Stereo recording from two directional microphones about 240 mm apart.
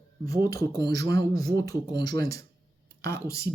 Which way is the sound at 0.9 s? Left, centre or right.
Right.